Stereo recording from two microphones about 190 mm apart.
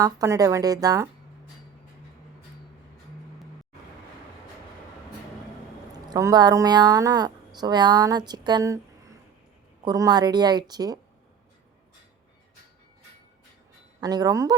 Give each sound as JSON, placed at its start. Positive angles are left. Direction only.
{"t": 0.0, "sound": "speech", "side_deg": -20}
{"t": 6.1, "sound": "speech", "side_deg": -20}
{"t": 9.8, "sound": "speech", "side_deg": -20}
{"t": 14.0, "sound": "speech", "side_deg": -20}